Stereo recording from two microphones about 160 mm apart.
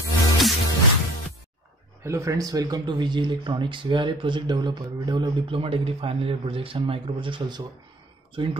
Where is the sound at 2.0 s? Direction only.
20° right (ahead or behind).